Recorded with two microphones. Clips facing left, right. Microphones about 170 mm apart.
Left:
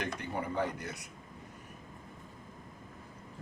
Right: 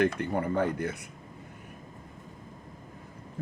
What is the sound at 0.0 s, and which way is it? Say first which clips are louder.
Speech: right 10 dB; 55° right (ahead or behind).